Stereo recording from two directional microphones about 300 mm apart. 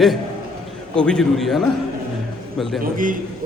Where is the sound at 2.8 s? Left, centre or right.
Right.